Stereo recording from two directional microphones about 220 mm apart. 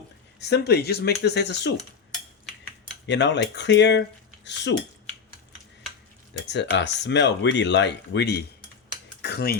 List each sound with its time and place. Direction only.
0.3 s speech: 50° left (ahead or behind)
3.1 s speech: 50° left (ahead or behind)
6.5 s speech: 50° left (ahead or behind)